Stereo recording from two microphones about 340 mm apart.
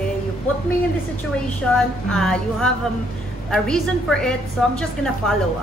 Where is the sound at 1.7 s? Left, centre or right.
Centre.